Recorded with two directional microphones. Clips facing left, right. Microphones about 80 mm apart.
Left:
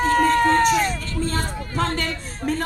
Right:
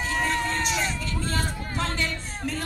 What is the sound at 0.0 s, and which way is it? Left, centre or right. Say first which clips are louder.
Run: left 9 dB; left.